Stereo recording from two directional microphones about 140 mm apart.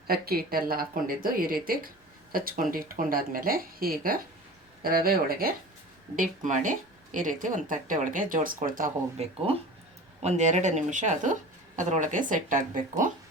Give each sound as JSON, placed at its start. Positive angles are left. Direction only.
{"t": 0.1, "sound": "speech", "side_deg": -90}
{"t": 6.1, "sound": "speech", "side_deg": -65}
{"t": 9.1, "sound": "speech", "side_deg": -50}